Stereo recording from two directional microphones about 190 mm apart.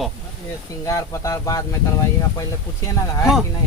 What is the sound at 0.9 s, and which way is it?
Speech, 15° left (ahead or behind).